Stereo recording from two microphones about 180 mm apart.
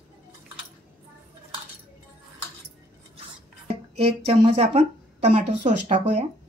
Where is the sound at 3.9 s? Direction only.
30° right (ahead or behind).